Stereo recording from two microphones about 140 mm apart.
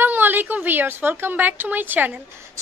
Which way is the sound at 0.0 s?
15° right (ahead or behind).